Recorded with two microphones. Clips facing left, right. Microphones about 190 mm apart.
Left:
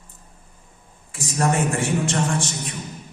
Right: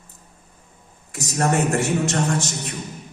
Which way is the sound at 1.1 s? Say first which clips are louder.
Right 1 dB; 40° right (ahead or behind).